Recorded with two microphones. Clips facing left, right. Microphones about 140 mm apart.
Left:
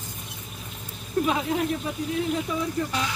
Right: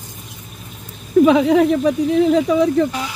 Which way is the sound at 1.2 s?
90° right.